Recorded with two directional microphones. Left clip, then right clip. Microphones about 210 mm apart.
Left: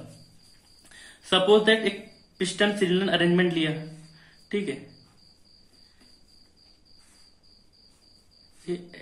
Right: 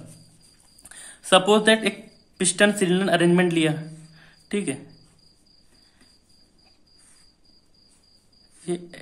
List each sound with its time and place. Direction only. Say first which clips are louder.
0.8 s speech: right 5 dB; 40° right (ahead or behind)
4.2 s a sound: right 1 dB; 40° right (ahead or behind)
8.7 s speech: right 3 dB; 45° right (ahead or behind)